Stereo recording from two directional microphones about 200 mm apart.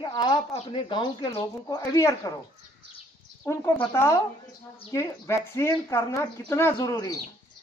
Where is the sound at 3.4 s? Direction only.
15° left (ahead or behind).